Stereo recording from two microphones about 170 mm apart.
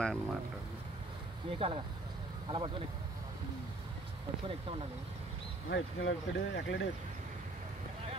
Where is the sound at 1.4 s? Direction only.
30° right (ahead or behind).